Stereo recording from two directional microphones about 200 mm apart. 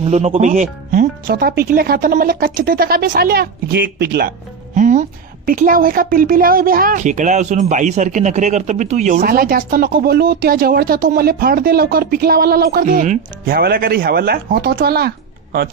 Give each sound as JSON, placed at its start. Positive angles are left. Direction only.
{"t": 0.0, "sound": "a woman's voice", "side_deg": -30}
{"t": 4.7, "sound": "a woman's voice", "side_deg": -40}